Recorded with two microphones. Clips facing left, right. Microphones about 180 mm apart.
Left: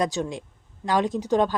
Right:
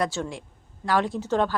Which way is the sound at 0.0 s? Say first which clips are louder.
Left 2 dB; 20° left (ahead or behind).